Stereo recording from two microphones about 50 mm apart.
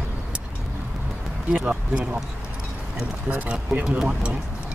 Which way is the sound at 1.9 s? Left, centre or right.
Right.